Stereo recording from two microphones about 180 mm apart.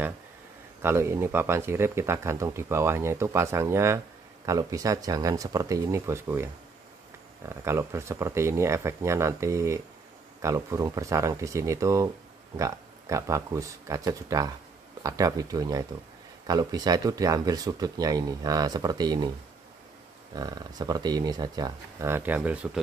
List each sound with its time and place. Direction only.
0.8 s speech: 15° right (ahead or behind)
20.3 s speech: 20° right (ahead or behind)